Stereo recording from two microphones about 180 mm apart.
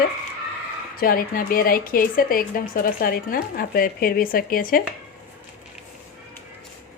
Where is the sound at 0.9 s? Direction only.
55° left (ahead or behind).